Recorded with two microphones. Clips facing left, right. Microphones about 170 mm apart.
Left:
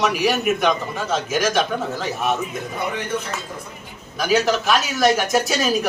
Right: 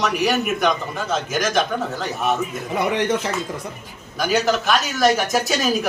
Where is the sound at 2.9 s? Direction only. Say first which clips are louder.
Right 5 dB; 90° right.